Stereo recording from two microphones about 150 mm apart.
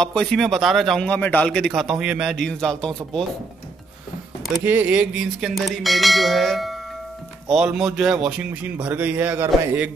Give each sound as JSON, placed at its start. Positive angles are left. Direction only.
{"t": 0.0, "sound": "a man's voice", "side_deg": 5}
{"t": 4.6, "sound": "a man's voice", "side_deg": -10}